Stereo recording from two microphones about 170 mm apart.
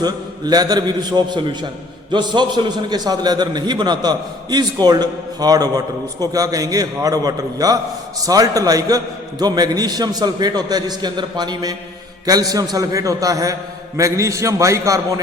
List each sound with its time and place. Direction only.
0.0 s a man's voice: 25° right (ahead or behind)